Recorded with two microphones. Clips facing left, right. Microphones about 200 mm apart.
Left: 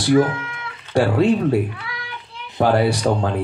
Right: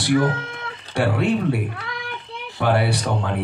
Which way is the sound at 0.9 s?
60° right (ahead or behind).